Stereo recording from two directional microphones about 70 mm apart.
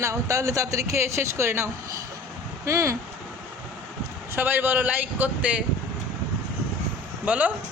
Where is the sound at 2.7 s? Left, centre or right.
Right.